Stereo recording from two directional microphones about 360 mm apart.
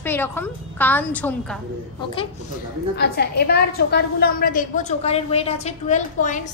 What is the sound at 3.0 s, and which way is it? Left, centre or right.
A woman's voice, left.